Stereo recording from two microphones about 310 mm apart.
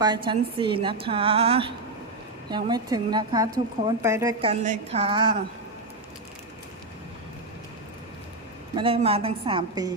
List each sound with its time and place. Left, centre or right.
0.0 s a woman's voice: centre
8.7 s a woman's voice: centre